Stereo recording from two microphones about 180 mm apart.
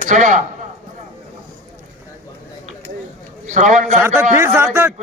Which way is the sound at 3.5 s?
45° right (ahead or behind).